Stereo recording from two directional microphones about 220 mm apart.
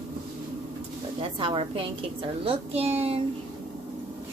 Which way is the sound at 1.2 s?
25° right (ahead or behind).